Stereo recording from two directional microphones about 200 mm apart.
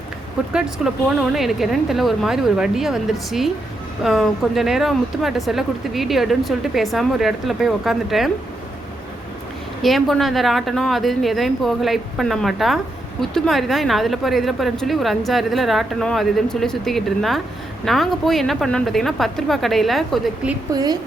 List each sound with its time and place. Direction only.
0.5 s a woman's voice: centre (ahead or behind)
9.8 s a woman's voice: centre (ahead or behind)
20.7 s speech: 20° right (ahead or behind)